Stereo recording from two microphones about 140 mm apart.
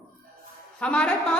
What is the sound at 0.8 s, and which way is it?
Speech, 10° left (ahead or behind).